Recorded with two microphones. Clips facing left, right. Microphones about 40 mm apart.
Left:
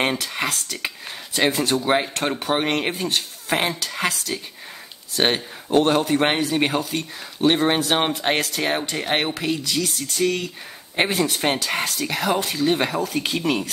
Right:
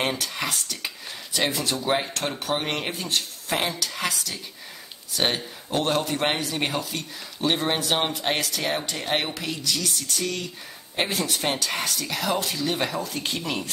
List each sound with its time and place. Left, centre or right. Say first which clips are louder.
0.5 s speech: left 3 dB; left
1.3 s speech: left 5 dB; left